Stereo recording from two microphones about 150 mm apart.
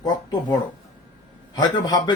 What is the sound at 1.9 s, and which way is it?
Speech, 25° left (ahead or behind).